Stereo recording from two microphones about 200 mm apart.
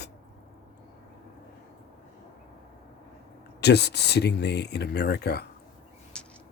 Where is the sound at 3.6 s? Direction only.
55° left (ahead or behind).